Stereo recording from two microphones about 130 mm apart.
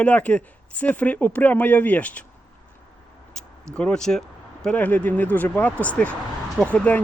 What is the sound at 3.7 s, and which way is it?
Speech, 10° left (ahead or behind).